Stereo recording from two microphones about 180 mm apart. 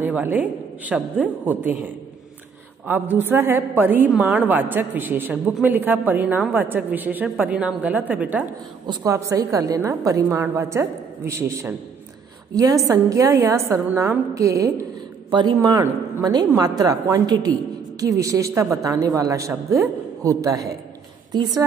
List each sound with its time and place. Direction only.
0.0 s a woman's voice: 10° right (ahead or behind)
2.9 s a woman's voice: 10° right (ahead or behind)
8.8 s a woman's voice: 20° right (ahead or behind)
12.8 s a woman's voice: 20° right (ahead or behind)